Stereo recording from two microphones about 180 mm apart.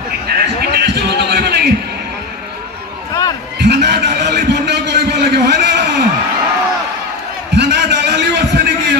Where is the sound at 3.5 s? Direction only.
65° right (ahead or behind).